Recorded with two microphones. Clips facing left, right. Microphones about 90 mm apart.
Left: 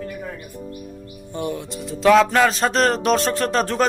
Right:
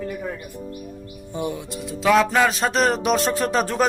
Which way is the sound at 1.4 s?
5° right (ahead or behind).